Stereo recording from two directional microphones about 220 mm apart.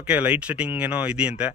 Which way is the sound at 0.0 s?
5° right (ahead or behind).